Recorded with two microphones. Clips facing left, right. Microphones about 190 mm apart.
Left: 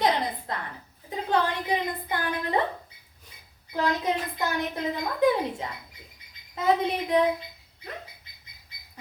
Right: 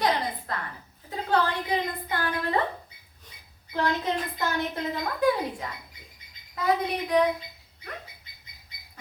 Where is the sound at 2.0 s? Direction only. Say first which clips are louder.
Even; 20° left (ahead or behind).